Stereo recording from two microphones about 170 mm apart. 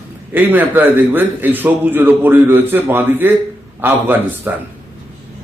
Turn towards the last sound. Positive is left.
turn(degrees=-10)  # may be behind; listen again after turning